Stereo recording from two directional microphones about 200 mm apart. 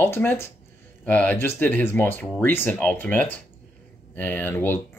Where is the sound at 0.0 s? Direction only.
10° left (ahead or behind).